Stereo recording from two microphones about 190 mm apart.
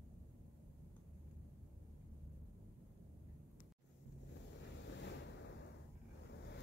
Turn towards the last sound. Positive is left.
turn(degrees=70)  # may be behind; listen again after turning